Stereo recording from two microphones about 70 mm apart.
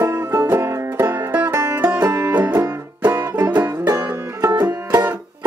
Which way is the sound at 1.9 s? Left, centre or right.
Right.